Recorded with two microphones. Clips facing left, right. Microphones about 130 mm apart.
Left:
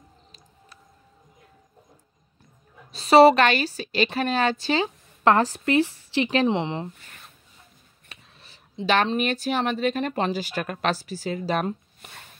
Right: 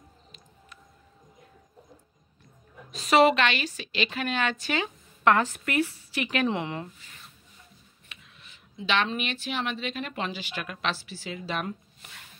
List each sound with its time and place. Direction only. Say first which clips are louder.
2.9 s a woman's voice: left 6 dB; 30° left (ahead or behind)
8.1 s speech: left 2 dB; 35° left (ahead or behind)